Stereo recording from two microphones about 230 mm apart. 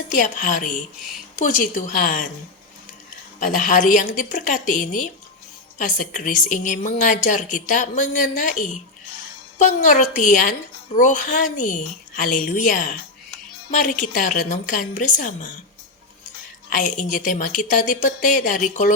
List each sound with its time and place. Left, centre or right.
0.1 s a woman's voice: left
3.4 s a woman's voice: left
16.6 s a woman's voice: left